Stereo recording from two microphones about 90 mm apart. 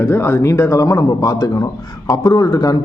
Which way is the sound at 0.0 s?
25° left (ahead or behind).